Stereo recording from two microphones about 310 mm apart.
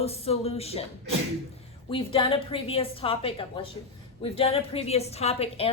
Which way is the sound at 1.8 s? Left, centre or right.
Centre.